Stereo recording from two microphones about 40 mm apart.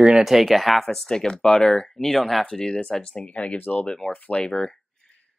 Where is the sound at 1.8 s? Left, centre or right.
Centre.